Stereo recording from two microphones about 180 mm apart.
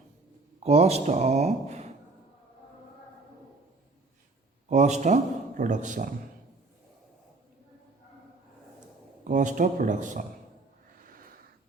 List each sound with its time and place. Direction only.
0.6 s speech: 35° right (ahead or behind)
4.7 s a man's voice: 40° right (ahead or behind)
9.2 s a man's voice: 45° right (ahead or behind)